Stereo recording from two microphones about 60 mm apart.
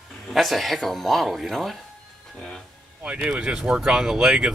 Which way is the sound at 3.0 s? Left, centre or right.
Right.